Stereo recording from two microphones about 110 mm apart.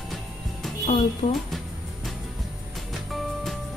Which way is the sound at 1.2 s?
70° left (ahead or behind).